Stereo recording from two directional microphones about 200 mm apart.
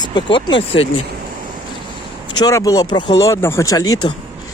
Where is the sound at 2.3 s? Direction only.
15° left (ahead or behind).